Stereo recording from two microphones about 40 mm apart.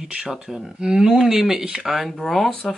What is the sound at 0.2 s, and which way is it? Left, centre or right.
Speech, centre.